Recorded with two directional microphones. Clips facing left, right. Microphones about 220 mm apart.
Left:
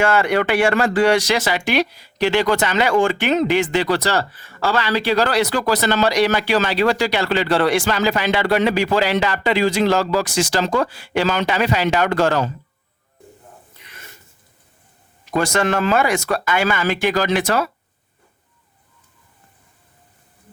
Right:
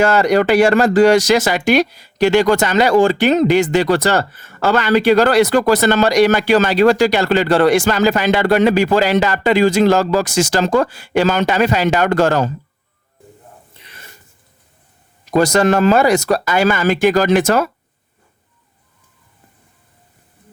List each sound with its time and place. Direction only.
0.0 s speech: 40° right (ahead or behind)
13.7 s a sound: 30° right (ahead or behind)
15.3 s speech: 40° right (ahead or behind)